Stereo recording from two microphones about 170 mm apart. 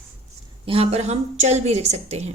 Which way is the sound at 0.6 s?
35° right (ahead or behind).